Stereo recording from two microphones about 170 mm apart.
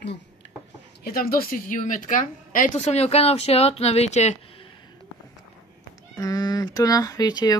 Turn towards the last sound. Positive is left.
turn(degrees=20)  # may be behind; listen again after turning